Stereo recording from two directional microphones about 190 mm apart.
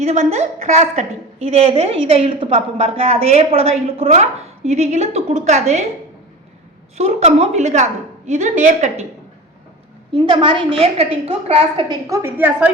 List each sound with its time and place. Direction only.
0.0 s a woman's voice: 35° right (ahead or behind)
6.9 s a woman's voice: 35° right (ahead or behind)
10.1 s a woman's voice: 25° right (ahead or behind)
12.0 s a woman's voice: 15° right (ahead or behind)